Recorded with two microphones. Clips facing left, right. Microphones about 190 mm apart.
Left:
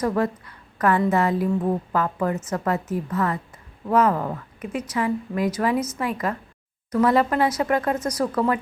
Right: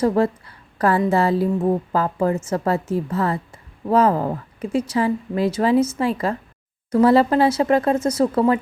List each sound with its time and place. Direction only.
0.0 s a woman's voice: 30° right (ahead or behind)